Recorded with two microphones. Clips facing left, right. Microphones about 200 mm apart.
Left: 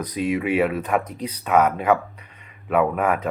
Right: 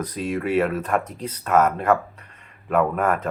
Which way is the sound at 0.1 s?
5° left (ahead or behind).